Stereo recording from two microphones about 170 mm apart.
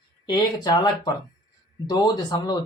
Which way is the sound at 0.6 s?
25° left (ahead or behind).